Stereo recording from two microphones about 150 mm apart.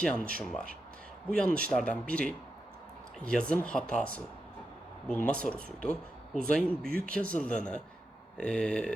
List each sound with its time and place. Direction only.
0.0 s speech: 5° left (ahead or behind)
6.8 s speech: 75° right (ahead or behind)
7.1 s speech: 5° left (ahead or behind)